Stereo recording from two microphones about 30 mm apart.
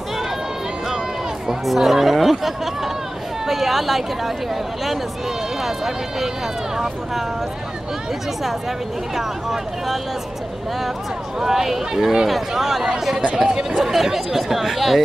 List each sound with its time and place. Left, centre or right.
1.7 s speech: centre
5.6 s speech: centre
9.1 s speech: centre
11.4 s speech: centre